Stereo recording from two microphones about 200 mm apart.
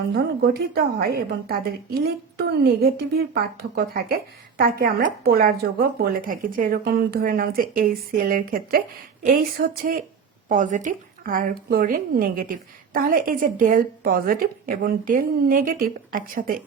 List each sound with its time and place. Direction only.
0.1 s a woman's voice: 50° right (ahead or behind)